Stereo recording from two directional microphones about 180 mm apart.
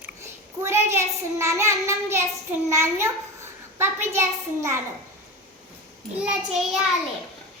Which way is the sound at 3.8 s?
15° right (ahead or behind).